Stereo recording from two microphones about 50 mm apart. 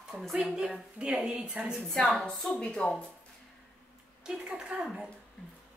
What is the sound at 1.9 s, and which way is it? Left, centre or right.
A woman's voice, centre.